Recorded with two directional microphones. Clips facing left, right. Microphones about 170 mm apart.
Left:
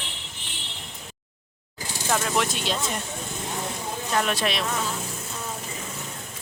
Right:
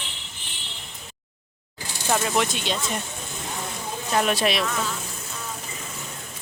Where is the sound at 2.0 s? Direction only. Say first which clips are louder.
Right 2 dB; 5° right (ahead or behind).